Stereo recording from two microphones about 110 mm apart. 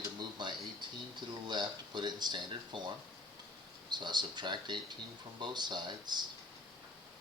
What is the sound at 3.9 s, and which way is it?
Speech, 45° right (ahead or behind).